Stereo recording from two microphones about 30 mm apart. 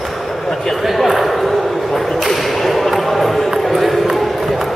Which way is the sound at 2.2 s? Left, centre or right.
Centre.